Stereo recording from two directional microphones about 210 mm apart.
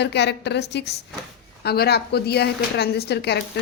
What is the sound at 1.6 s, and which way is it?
Speech, 50° left (ahead or behind).